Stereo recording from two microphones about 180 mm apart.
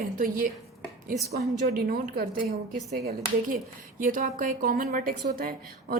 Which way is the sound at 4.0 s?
45° right (ahead or behind).